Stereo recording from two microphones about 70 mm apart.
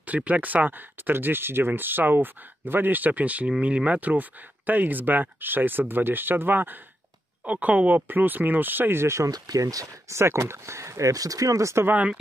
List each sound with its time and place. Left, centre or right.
0.0 s speech: right
9.3 s speech: right
11.9 s speech: right